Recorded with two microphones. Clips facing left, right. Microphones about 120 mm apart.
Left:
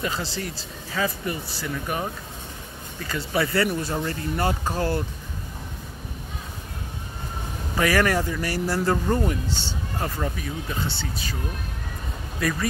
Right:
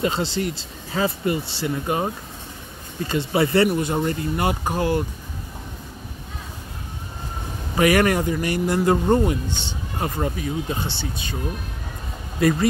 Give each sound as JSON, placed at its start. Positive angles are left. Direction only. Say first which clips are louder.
{"t": 0.0, "sound": "speech", "louder": "right 6 dB", "side_deg": -25}
{"t": 7.7, "sound": "speech", "louder": "right 4 dB", "side_deg": -20}
{"t": 12.4, "sound": "speech", "louder": "right 7 dB", "side_deg": -25}